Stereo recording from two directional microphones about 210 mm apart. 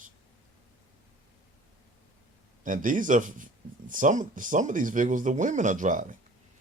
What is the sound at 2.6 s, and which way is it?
Speech, 40° right (ahead or behind).